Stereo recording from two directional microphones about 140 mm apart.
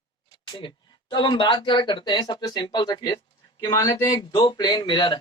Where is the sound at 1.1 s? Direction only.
35° left (ahead or behind).